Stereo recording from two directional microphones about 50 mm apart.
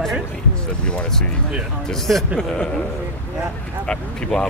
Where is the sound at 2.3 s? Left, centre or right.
Centre.